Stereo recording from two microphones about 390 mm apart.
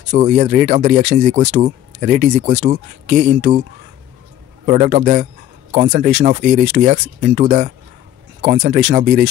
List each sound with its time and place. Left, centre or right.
0.1 s speech: centre
4.6 s speech: centre